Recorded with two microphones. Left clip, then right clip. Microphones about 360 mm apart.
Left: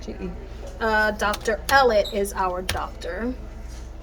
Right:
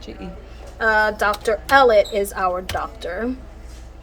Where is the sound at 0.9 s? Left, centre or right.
Centre.